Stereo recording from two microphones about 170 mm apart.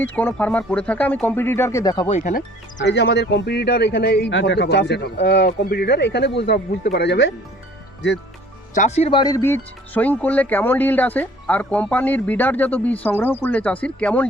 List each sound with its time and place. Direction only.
0.0 s speech: 10° left (ahead or behind)
2.0 s speech: 40° left (ahead or behind)
2.3 s speech: 90° left
8.7 s speech: 45° left (ahead or behind)
9.1 s speech: 20° left (ahead or behind)